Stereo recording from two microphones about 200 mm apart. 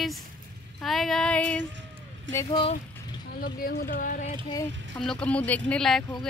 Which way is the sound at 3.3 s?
50° left (ahead or behind).